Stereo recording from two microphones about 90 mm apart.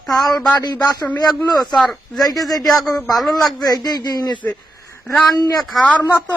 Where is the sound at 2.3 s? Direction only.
45° left (ahead or behind).